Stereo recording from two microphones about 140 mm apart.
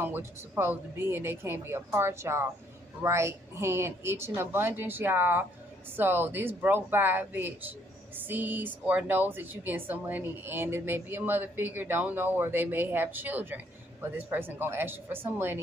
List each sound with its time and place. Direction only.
0.0 s speech: 15° right (ahead or behind)